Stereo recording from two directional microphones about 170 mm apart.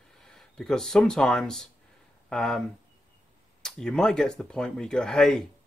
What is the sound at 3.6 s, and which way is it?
Speech, 5° left (ahead or behind).